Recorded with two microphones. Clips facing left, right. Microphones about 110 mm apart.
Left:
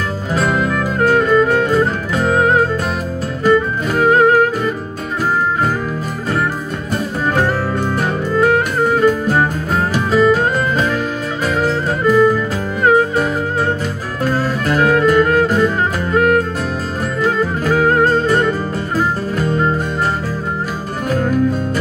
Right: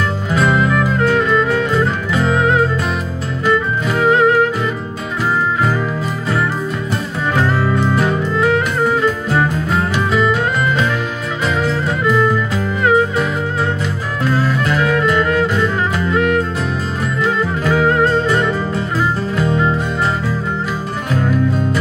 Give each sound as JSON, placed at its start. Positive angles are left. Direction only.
{"t": 0.3, "sound": "music", "side_deg": 40}
{"t": 7.3, "sound": "music", "side_deg": 45}
{"t": 21.1, "sound": "music", "side_deg": 40}